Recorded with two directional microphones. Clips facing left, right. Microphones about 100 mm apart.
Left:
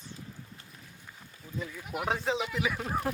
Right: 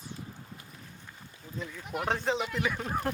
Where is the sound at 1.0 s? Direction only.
5° left (ahead or behind).